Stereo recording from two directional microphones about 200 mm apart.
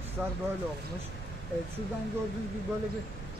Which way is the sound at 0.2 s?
5° right (ahead or behind).